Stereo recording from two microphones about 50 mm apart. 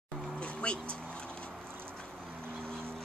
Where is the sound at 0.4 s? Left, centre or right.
Left.